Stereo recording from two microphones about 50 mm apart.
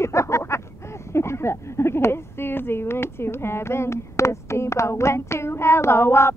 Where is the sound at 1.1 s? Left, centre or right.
Left.